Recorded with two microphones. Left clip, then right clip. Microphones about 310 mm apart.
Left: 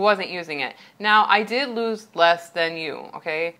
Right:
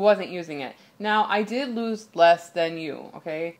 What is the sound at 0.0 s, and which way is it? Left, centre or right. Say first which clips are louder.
Speech: even; left.